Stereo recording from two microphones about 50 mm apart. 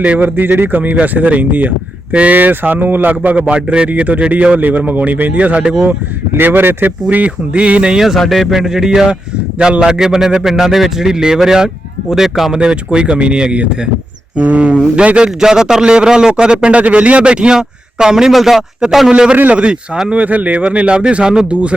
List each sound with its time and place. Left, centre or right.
0.0 s a man's voice: right
3.4 s a man's voice: right
6.3 s speech: right
7.1 s speech: right
8.0 s a man's voice: centre
12.5 s a man's voice: centre
18.3 s a man's voice: centre
19.1 s speech: right